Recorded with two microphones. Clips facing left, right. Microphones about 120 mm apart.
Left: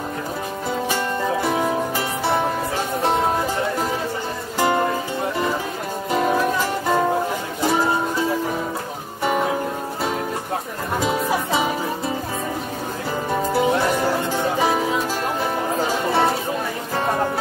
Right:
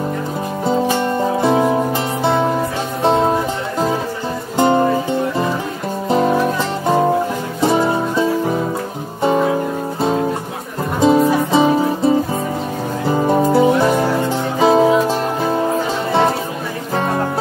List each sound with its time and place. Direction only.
4.6 s music: 25° right (ahead or behind)
11.0 s music: 30° right (ahead or behind)
13.3 s music: 30° right (ahead or behind)